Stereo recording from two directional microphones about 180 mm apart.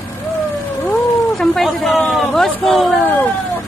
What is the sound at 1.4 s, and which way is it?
Speech, centre (ahead or behind).